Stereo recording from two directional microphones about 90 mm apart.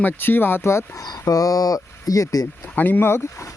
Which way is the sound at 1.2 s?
40° left (ahead or behind).